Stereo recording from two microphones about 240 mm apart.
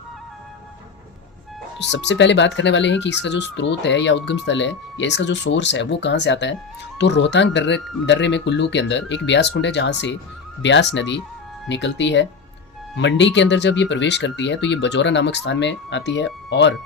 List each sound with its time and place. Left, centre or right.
1.9 s speech: left